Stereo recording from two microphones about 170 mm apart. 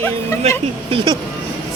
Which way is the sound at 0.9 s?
25° right (ahead or behind).